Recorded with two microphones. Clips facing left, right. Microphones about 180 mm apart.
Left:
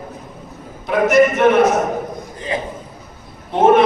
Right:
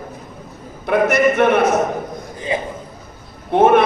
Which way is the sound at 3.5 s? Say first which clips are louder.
Even; 55° right (ahead or behind).